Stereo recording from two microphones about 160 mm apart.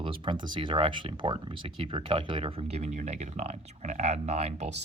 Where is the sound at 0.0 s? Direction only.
30° right (ahead or behind).